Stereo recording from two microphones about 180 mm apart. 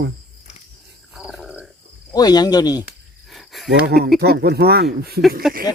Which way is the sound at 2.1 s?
20° left (ahead or behind).